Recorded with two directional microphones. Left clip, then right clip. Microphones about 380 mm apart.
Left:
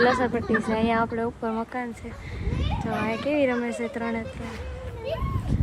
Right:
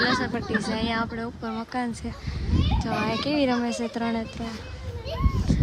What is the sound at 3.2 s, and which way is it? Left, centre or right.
Speech, centre.